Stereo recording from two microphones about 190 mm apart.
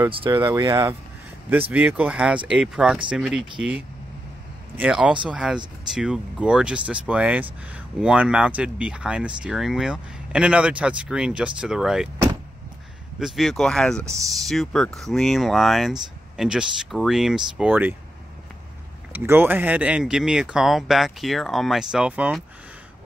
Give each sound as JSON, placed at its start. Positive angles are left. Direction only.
{"t": 0.1, "sound": "speech", "side_deg": -25}
{"t": 1.7, "sound": "speech", "side_deg": -10}
{"t": 13.2, "sound": "speech", "side_deg": 0}
{"t": 19.1, "sound": "speech", "side_deg": -10}